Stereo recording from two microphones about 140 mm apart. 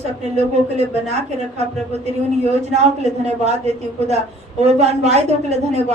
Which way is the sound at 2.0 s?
50° right (ahead or behind).